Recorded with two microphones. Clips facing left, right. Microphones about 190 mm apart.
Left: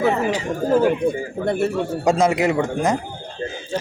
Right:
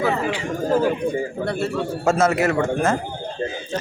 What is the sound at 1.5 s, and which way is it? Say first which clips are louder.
A man's voice: left 3 dB; 20° left (ahead or behind).